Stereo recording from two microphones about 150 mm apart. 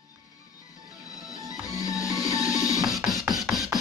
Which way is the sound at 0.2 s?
25° left (ahead or behind).